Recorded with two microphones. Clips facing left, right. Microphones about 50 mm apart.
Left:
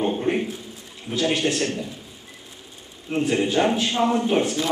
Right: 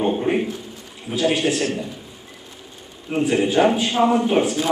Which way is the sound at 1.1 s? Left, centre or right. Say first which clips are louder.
Right 3 dB; centre.